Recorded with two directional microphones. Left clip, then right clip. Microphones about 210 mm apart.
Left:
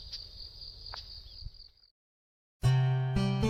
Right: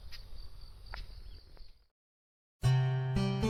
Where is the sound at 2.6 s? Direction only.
Centre (ahead or behind).